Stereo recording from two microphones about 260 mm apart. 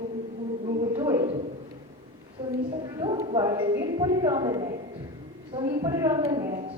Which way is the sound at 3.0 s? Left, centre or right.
Centre.